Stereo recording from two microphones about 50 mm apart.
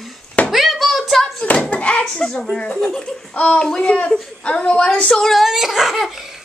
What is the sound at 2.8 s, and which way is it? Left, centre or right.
Speech, centre.